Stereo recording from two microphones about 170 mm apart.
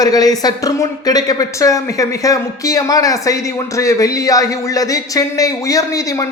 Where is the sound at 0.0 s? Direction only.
20° left (ahead or behind).